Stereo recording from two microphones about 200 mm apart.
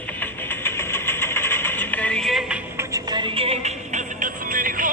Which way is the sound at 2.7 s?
20° right (ahead or behind).